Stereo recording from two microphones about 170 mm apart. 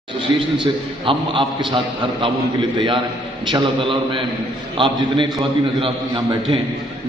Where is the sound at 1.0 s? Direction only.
30° right (ahead or behind).